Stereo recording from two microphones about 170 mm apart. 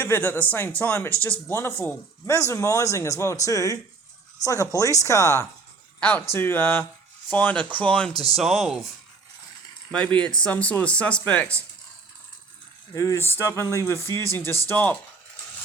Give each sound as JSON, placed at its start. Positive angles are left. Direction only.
{"t": 0.0, "sound": "speech", "side_deg": 10}
{"t": 9.9, "sound": "speech", "side_deg": 5}
{"t": 12.9, "sound": "speech", "side_deg": 20}